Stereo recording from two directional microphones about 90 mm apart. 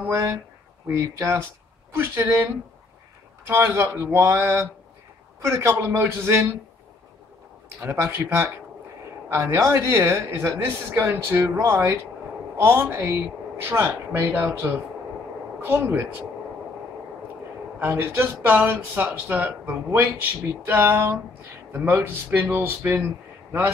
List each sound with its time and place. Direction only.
0.0 s a man's voice: 25° right (ahead or behind)
7.8 s a man's voice: 30° right (ahead or behind)
17.7 s a man's voice: 25° right (ahead or behind)